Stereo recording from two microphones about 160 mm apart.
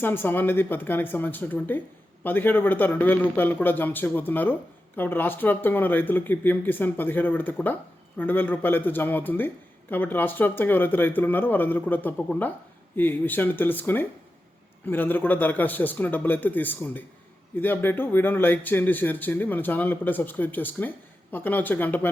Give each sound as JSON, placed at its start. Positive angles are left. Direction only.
{"t": 0.0, "sound": "speech", "side_deg": 15}